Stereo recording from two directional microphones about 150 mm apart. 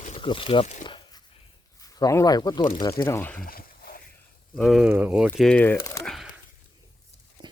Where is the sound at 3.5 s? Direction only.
80° left.